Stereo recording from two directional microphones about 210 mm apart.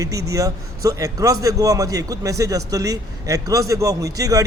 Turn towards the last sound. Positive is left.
turn(degrees=-15)  # may be behind; listen again after turning